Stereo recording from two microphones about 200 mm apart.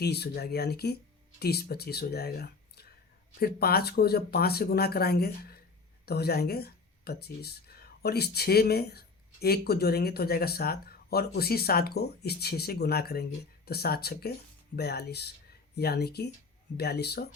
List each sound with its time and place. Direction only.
0.0 s speech: 55° left (ahead or behind)